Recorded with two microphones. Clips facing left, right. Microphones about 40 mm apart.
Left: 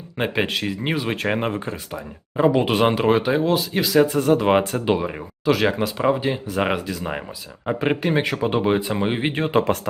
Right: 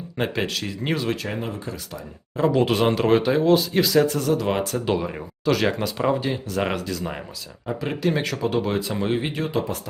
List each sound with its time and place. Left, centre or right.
0.2 s speech: left
1.1 s speech: left
1.9 s speech: centre
4.2 s speech: left
4.9 s speech: centre
7.7 s speech: left
8.0 s speech: left